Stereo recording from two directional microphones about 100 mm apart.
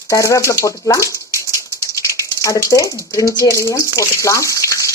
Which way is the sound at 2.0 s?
30° left (ahead or behind).